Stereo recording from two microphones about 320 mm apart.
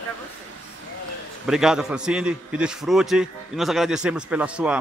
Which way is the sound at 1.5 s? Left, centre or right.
Centre.